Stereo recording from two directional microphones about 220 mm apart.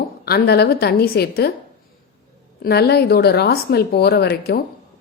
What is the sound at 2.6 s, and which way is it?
A woman's voice, 45° left (ahead or behind).